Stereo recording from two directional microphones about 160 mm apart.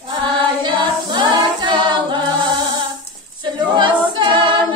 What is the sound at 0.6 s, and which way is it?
A capella, 30° right (ahead or behind).